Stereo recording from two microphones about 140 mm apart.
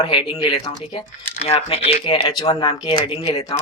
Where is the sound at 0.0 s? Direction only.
35° left (ahead or behind).